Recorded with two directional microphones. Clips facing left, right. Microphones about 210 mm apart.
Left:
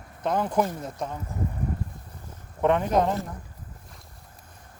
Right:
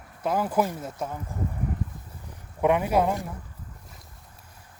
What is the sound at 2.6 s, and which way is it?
Speech, 10° right (ahead or behind).